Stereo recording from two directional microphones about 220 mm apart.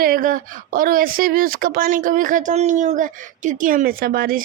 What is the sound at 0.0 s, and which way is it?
Speech, 40° right (ahead or behind).